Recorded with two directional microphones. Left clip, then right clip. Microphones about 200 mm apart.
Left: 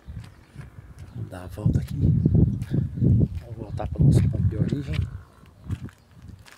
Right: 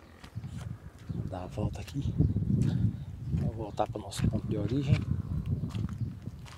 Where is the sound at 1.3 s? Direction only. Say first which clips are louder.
Left 5 dB; 15° left (ahead or behind).